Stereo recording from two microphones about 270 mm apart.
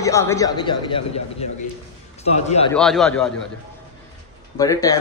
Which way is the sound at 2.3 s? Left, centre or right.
Left.